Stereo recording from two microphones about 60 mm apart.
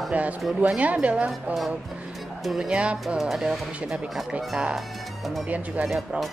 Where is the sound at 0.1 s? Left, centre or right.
Right.